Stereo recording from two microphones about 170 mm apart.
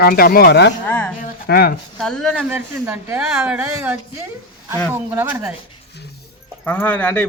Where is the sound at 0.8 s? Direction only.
10° left (ahead or behind).